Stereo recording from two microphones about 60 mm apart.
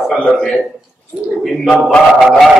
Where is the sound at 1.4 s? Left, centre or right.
Centre.